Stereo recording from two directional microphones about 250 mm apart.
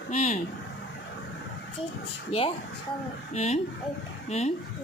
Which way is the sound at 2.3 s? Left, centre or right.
Left.